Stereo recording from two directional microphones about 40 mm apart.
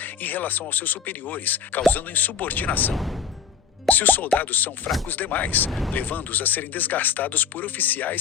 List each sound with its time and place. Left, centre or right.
0.0 s speech: left
2.9 s speech: centre
3.8 s speech: left